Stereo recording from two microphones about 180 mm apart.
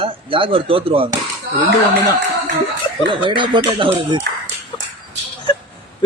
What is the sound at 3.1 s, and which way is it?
Speech, 25° right (ahead or behind).